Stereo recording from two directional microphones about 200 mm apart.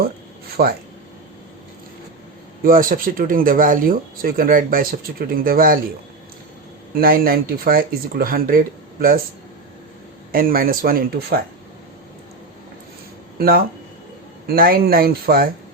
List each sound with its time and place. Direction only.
0.5 s speech: 50° right (ahead or behind)
2.6 s speech: 45° right (ahead or behind)
6.9 s speech: 45° right (ahead or behind)
10.3 s speech: 45° right (ahead or behind)
13.4 s speech: 50° right (ahead or behind)